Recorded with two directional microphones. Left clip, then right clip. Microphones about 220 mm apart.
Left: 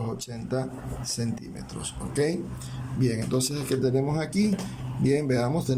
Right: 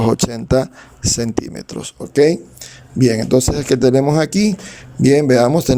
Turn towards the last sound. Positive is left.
turn(degrees=-50)  # may be behind; listen again after turning